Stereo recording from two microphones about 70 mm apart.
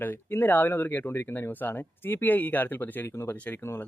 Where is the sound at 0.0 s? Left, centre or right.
Left.